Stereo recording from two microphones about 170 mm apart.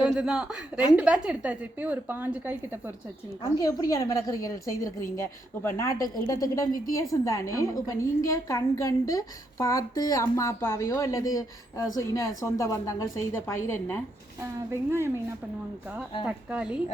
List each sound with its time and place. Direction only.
0.0 s a woman's voice: 5° right (ahead or behind)
3.6 s a woman's voice: 20° left (ahead or behind)
14.8 s a woman's voice: 15° right (ahead or behind)
16.2 s a woman's voice: 5° right (ahead or behind)